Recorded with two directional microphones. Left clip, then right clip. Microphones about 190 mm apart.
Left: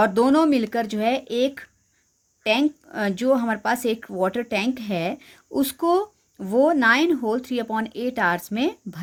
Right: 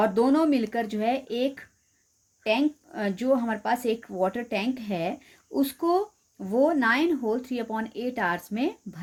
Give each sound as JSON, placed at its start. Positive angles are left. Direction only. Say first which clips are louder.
{"t": 0.0, "sound": "speech", "louder": "left 4 dB", "side_deg": 35}